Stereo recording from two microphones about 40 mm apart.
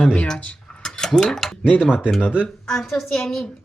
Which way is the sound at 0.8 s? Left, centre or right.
Centre.